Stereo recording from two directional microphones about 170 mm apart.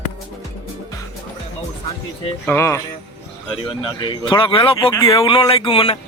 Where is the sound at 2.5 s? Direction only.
15° left (ahead or behind).